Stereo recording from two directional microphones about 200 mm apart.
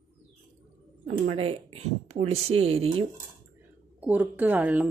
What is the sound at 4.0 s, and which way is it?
Speech, 5° right (ahead or behind).